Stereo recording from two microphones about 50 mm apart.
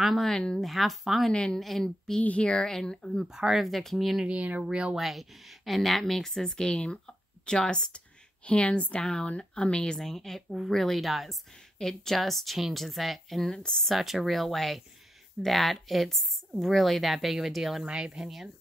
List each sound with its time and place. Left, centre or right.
0.0 s a woman's voice: centre
0.7 s a woman's voice: centre
1.3 s speech: centre
1.6 s a woman's voice: centre
2.2 s speech: left
3.3 s speech: centre
3.6 s a woman's voice: centre
4.3 s speech: right
4.9 s a woman's voice: centre; by 9.9 s left
9.9 s a woman's voice: centre
11.8 s a woman's voice: centre
13.5 s speech: centre
13.9 s a woman's voice: centre